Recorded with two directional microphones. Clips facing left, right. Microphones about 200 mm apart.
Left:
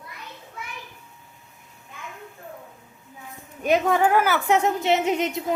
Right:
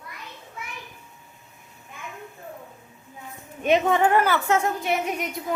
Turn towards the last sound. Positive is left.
turn(degrees=25)  # may be behind; listen again after turning